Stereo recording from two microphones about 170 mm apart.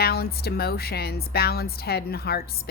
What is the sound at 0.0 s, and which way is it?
A woman's voice, 65° left (ahead or behind).